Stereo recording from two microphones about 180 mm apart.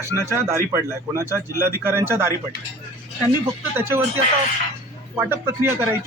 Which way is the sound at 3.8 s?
10° right (ahead or behind).